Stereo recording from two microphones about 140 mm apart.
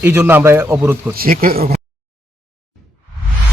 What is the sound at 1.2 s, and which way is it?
Speech, 85° right.